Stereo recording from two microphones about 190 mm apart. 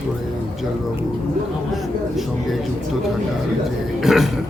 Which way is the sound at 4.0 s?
Centre (ahead or behind).